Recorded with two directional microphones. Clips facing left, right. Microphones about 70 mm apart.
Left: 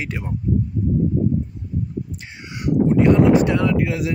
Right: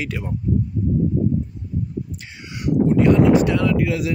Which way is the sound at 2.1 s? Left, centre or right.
Left.